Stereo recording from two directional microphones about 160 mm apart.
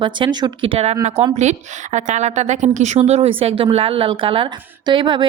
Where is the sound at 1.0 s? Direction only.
40° right (ahead or behind).